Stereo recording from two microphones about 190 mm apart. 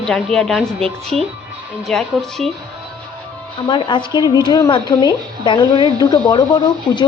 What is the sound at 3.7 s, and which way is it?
Speech, 25° left (ahead or behind).